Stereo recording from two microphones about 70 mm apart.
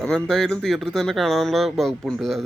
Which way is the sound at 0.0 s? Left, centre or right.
Centre.